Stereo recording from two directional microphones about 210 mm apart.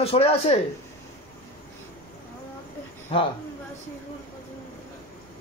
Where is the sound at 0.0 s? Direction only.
30° left (ahead or behind).